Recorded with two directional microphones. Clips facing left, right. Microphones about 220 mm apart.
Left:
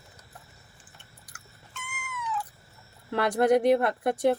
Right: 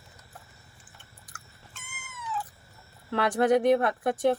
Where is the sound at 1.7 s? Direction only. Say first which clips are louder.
Left 8 dB; 40° right (ahead or behind).